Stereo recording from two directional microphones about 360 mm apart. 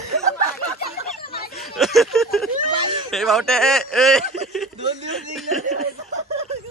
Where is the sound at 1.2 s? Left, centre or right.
Left.